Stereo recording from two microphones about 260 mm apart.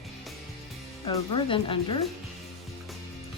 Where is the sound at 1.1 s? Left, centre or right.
Centre.